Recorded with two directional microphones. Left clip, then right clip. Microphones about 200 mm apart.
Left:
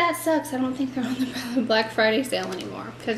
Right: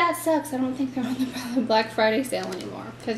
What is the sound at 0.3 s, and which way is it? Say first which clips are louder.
Speech: left 1 dB; 5° right (ahead or behind).